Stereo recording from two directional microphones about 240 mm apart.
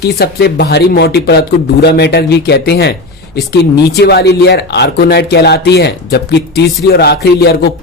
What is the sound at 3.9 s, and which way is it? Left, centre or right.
Speech, left.